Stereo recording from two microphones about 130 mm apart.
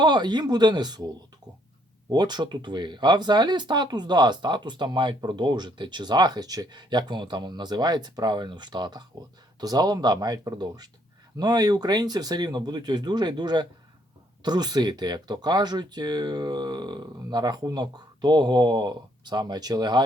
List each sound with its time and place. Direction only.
0.0 s speech: 35° right (ahead or behind)